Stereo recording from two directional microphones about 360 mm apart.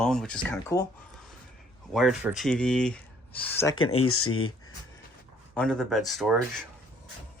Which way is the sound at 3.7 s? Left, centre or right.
Left.